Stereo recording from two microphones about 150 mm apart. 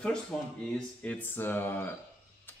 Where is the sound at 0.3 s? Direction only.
5° left (ahead or behind).